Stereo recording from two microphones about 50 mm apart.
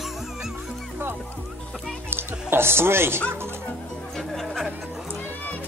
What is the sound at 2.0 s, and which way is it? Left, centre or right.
Music, right.